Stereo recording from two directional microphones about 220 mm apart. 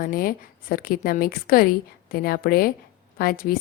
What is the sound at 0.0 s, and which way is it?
A woman's voice, 40° left (ahead or behind).